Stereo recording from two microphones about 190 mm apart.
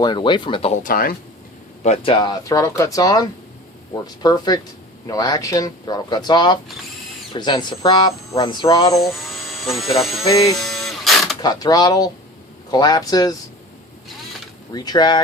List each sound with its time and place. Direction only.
0.0 s speech: 25° left (ahead or behind); by 1.1 s 45° left (ahead or behind)
1.8 s speech: 35° left (ahead or behind)
9.2 s a sound: centre (ahead or behind)
10.2 s speech: 15° left (ahead or behind)
10.7 s a sound: centre (ahead or behind)
11.3 s speech: 20° left (ahead or behind)
14.7 s speech: 20° left (ahead or behind)